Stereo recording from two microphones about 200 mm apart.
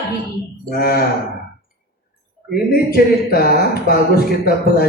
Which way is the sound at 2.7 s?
45° left (ahead or behind).